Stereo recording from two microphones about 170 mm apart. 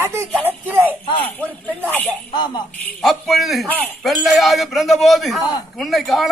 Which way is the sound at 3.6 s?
10° left (ahead or behind).